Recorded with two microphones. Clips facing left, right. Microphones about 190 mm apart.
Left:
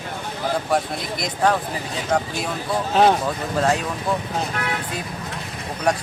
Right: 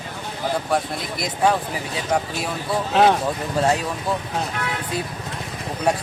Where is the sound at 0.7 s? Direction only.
Centre (ahead or behind).